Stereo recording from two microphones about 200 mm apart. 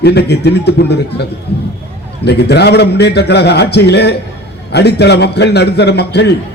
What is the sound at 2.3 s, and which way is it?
A man's voice, 55° left (ahead or behind).